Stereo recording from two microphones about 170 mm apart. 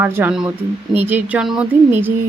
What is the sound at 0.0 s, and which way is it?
Speech, 15° right (ahead or behind).